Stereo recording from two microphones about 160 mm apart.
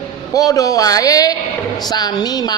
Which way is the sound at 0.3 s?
20° left (ahead or behind).